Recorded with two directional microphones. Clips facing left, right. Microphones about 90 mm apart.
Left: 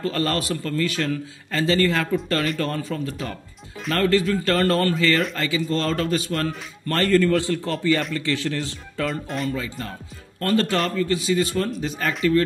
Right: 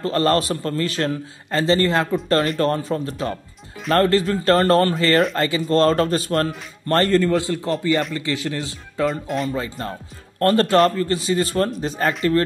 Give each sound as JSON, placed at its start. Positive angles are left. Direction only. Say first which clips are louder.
{"t": 0.0, "sound": "a man's voice", "louder": "right 5 dB", "side_deg": -35}
{"t": 7.2, "sound": "a man's voice", "louder": "even", "side_deg": -20}
{"t": 9.0, "sound": "speech", "louder": "right 4 dB", "side_deg": 0}
{"t": 9.5, "sound": "a man's voice", "louder": "right 3 dB", "side_deg": -35}